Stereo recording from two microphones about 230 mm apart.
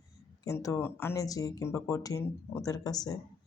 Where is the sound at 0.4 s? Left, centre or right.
Centre.